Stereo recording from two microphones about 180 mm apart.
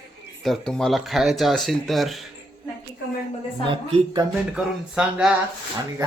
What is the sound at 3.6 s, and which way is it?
Speech, 25° right (ahead or behind).